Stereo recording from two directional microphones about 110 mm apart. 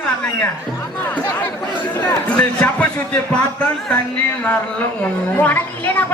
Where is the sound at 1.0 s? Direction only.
15° left (ahead or behind).